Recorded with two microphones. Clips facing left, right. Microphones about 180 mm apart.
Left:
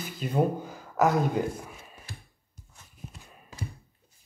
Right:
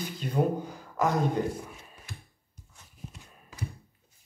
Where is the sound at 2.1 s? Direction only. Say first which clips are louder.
Right 1 dB; 30° left (ahead or behind).